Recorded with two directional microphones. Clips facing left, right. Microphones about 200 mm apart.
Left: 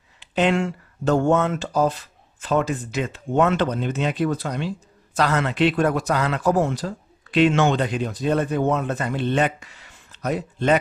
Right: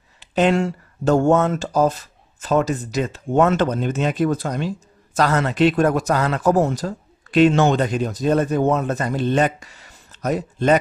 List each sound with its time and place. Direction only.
0.2 s speech: 40° right (ahead or behind)